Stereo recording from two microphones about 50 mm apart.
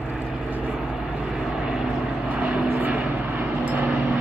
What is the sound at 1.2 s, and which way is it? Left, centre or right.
Vehicle, centre.